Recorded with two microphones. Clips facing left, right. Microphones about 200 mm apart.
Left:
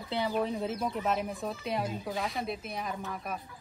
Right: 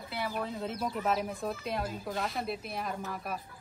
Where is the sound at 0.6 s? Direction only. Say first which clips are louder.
Left 2 dB; centre (ahead or behind).